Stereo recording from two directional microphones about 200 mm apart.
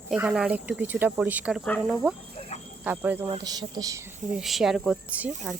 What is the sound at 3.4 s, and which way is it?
Speech, 20° right (ahead or behind).